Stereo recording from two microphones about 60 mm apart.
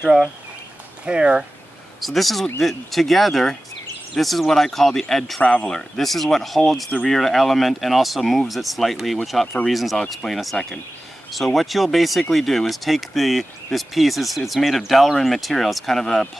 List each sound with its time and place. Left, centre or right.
0.0 s speech: centre
2.0 s speech: centre
5.4 s speech: left
5.7 s speech: centre